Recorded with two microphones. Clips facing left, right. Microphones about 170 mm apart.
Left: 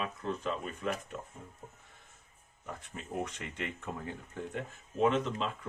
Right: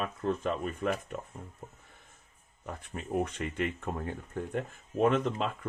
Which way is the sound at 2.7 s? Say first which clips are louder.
Right 6 dB; 55° right (ahead or behind).